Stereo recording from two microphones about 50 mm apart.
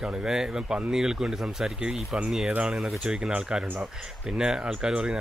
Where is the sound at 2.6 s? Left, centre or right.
Centre.